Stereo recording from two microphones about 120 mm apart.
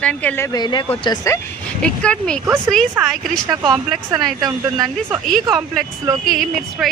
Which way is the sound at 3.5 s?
35° right (ahead or behind).